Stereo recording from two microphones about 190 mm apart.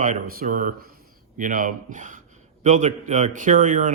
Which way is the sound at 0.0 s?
45° right (ahead or behind).